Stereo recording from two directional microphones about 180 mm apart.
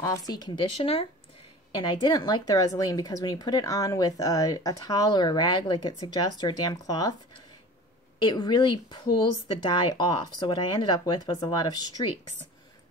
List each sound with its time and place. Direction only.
0.0 s speech: 20° left (ahead or behind)
8.2 s speech: 25° left (ahead or behind)